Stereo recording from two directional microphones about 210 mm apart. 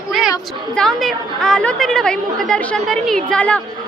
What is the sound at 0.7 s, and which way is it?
A woman's voice, centre (ahead or behind).